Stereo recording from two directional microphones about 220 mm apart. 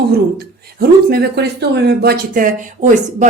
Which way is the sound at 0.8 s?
45° right (ahead or behind).